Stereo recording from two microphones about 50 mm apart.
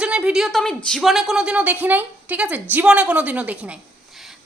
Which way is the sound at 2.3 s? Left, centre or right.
Right.